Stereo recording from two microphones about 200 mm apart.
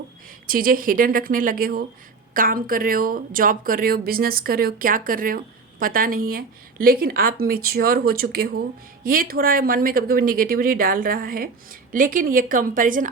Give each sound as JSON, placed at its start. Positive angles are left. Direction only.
{"t": 0.4, "sound": "speech", "side_deg": -45}